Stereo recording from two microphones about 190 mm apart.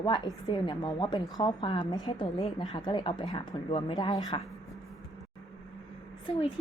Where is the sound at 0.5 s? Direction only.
20° left (ahead or behind).